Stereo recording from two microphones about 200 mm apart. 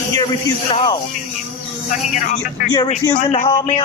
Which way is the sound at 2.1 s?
40° left (ahead or behind).